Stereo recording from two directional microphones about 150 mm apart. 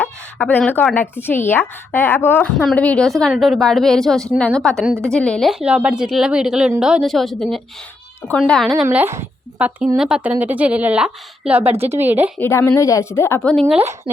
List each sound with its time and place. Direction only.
0.0 s a woman's voice: 10° left (ahead or behind)
8.8 s a woman's voice: 10° right (ahead or behind)
12.4 s speech: 15° left (ahead or behind)
13.5 s a woman's voice: 5° left (ahead or behind)